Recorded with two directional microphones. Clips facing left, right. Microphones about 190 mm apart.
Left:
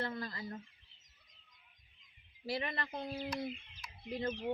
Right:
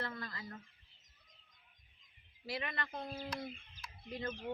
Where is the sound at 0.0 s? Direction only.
25° left (ahead or behind).